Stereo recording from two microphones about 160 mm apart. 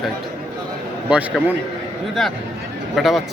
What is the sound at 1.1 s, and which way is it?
Speech, 10° right (ahead or behind).